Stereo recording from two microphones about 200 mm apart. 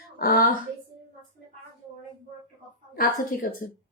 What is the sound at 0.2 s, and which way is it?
Speech, 45° left (ahead or behind).